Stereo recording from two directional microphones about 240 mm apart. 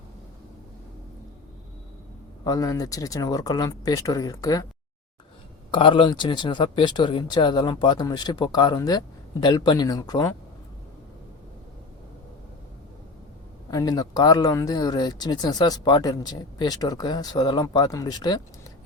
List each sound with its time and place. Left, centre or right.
2.4 s speech: centre
5.7 s speech: left
13.7 s speech: centre